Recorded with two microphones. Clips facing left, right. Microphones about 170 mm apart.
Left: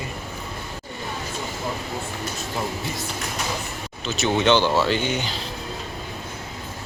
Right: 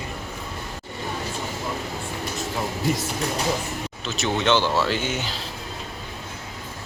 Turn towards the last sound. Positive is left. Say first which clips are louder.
# left 2 dB
turn(degrees=-5)  # may be behind; listen again after turning